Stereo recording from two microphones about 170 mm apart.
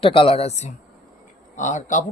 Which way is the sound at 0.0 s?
30° left (ahead or behind).